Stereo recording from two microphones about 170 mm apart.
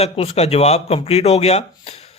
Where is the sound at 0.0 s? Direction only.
35° left (ahead or behind).